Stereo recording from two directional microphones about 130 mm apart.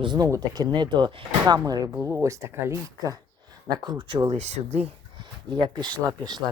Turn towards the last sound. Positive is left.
turn(degrees=-30)  # may be behind; listen again after turning